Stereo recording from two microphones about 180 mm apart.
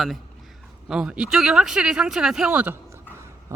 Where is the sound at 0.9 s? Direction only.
5° right (ahead or behind).